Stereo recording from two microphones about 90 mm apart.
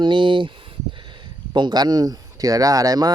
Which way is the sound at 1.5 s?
55° right (ahead or behind).